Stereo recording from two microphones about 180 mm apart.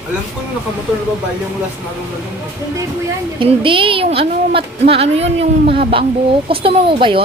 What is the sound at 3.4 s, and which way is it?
A woman's voice, 30° right (ahead or behind).